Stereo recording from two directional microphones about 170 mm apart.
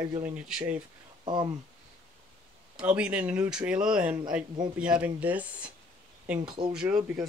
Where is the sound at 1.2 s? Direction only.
25° right (ahead or behind).